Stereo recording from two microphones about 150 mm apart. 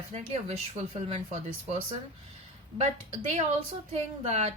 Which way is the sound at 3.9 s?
45° right (ahead or behind).